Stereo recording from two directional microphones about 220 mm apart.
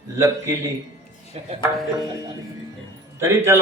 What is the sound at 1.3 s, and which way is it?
Speech, 30° right (ahead or behind).